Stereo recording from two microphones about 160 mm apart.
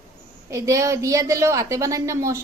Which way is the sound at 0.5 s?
20° right (ahead or behind).